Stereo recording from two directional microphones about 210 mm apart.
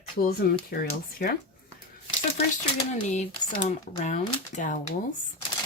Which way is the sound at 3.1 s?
35° left (ahead or behind).